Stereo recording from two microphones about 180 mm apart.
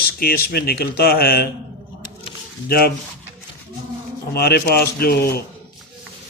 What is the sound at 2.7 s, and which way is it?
Speech, 60° left (ahead or behind).